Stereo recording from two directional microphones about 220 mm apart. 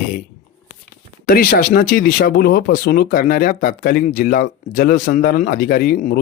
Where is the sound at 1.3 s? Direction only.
40° left (ahead or behind).